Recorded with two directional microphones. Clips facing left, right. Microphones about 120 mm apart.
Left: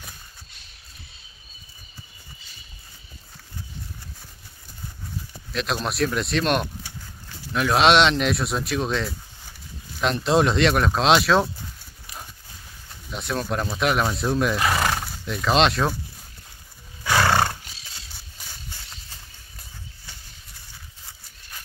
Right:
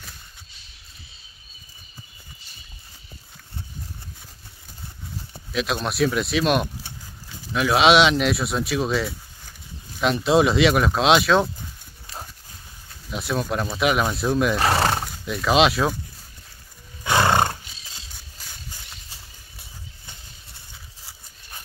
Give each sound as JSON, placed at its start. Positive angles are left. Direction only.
{"t": 5.5, "sound": "speech", "side_deg": 0}
{"t": 13.1, "sound": "speech", "side_deg": 0}
{"t": 14.6, "sound": "horse", "side_deg": -30}
{"t": 15.0, "sound": "speech", "side_deg": 0}
{"t": 17.0, "sound": "roar", "side_deg": -20}